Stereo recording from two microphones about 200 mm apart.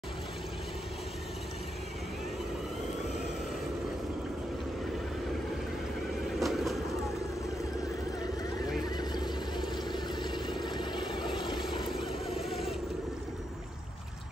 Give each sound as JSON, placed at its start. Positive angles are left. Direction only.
{"t": 6.4, "sound": "vehicle", "side_deg": 0}
{"t": 8.8, "sound": "a sound", "side_deg": 20}
{"t": 11.6, "sound": "vehicle", "side_deg": 0}